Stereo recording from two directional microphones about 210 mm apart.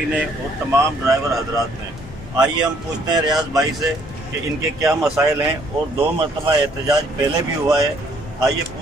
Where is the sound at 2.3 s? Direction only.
20° right (ahead or behind).